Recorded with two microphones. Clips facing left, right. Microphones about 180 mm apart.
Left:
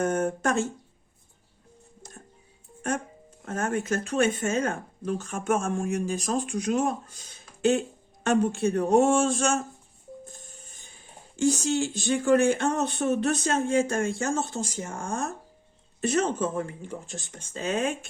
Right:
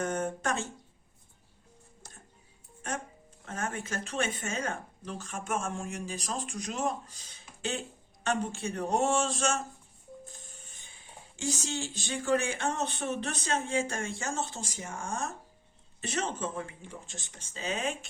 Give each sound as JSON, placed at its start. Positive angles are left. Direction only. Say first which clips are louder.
{"t": 0.0, "sound": "speech", "louder": "left 6 dB", "side_deg": 50}
{"t": 3.4, "sound": "speech", "louder": "left 8 dB", "side_deg": 45}
{"t": 8.2, "sound": "speech", "louder": "left 9 dB", "side_deg": 55}
{"t": 11.3, "sound": "speech", "louder": "left 10 dB", "side_deg": 50}